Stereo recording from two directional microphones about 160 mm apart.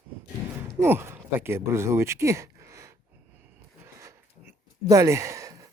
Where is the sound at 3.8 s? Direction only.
20° right (ahead or behind).